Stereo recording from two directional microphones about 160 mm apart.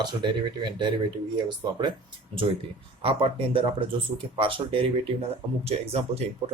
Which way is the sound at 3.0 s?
35° right (ahead or behind).